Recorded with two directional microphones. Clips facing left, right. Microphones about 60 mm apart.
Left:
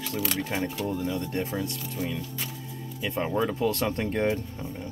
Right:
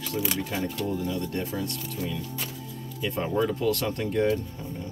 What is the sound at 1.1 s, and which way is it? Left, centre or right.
Speech, left.